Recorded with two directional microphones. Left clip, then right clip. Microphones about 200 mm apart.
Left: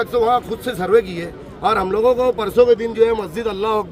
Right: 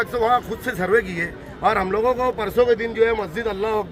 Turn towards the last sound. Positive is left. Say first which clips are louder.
# left 3 dB
turn(degrees=15)  # may be behind; listen again after turning